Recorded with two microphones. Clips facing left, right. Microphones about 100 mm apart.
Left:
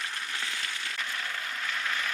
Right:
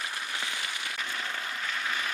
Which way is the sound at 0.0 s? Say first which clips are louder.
Right 1 dB; 10° right (ahead or behind).